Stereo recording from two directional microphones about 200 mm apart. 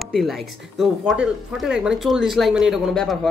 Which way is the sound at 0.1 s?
Centre (ahead or behind).